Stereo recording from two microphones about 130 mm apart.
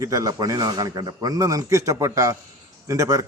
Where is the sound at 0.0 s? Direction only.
25° right (ahead or behind).